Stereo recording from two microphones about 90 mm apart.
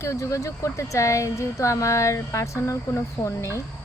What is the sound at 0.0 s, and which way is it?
Speech, 35° left (ahead or behind).